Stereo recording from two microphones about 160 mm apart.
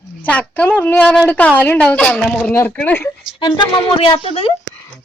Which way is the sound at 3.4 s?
30° left (ahead or behind).